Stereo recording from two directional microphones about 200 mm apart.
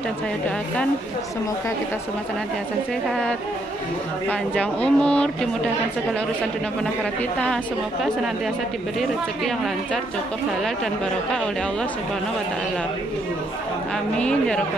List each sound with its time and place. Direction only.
3.1 s speech: 5° left (ahead or behind)
14.1 s speech: 5° left (ahead or behind)